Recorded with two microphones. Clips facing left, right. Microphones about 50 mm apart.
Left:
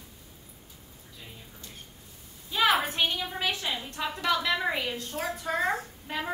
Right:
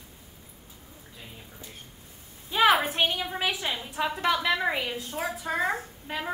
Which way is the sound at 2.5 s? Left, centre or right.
Right.